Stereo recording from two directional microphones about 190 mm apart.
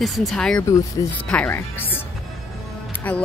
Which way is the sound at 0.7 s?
15° left (ahead or behind).